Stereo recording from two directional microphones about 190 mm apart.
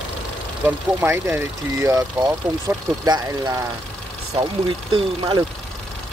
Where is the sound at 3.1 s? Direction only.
20° right (ahead or behind).